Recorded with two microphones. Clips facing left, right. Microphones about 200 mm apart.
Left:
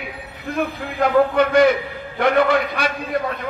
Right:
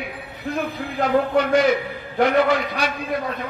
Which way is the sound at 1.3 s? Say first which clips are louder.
Left 2 dB; 55° left (ahead or behind).